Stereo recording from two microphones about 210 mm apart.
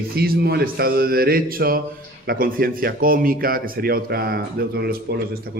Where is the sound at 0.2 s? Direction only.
50° right (ahead or behind).